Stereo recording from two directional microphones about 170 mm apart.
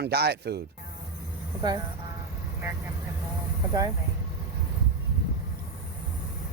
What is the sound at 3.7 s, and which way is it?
Speech, 20° right (ahead or behind).